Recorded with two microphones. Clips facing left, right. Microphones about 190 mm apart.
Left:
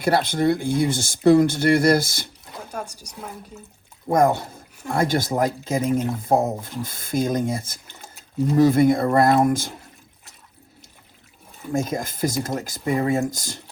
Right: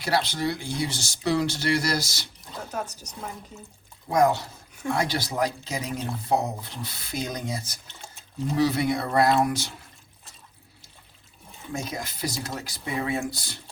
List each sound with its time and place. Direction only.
0.0 s speech: 55° left (ahead or behind)
2.6 s speech: 10° left (ahead or behind)
4.1 s speech: 55° left (ahead or behind)
11.7 s speech: 50° left (ahead or behind)